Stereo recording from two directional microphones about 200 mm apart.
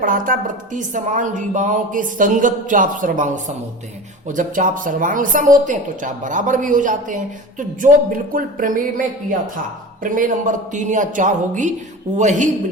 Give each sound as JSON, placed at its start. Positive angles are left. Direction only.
{"t": 0.0, "sound": "a woman's voice", "side_deg": -40}